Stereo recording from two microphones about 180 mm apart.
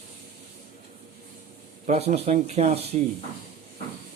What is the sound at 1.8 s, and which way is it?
Speech, 40° right (ahead or behind).